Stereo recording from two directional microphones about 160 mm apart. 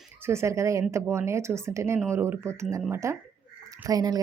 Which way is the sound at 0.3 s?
15° right (ahead or behind).